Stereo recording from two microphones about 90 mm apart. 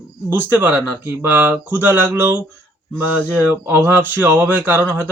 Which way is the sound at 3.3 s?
25° right (ahead or behind).